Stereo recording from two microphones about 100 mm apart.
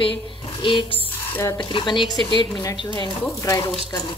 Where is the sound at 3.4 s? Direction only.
35° left (ahead or behind).